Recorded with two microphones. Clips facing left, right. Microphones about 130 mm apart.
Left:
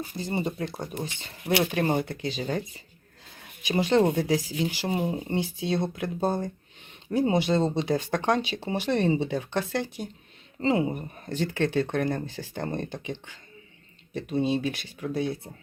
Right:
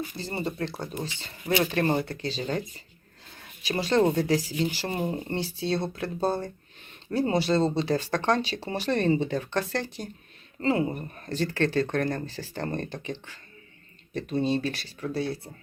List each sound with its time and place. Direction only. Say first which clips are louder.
0.2 s speech: left 3 dB; 20° left (ahead or behind)
1.7 s speech: even; 15° left (ahead or behind)